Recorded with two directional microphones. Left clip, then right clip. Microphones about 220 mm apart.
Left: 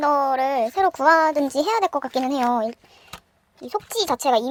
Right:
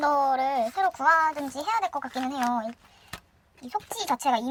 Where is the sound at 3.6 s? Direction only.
25° left (ahead or behind).